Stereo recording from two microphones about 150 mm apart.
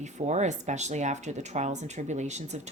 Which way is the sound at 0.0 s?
50° right (ahead or behind).